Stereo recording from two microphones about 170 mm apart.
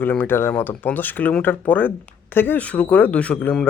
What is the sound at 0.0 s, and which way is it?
A man's voice, 10° left (ahead or behind).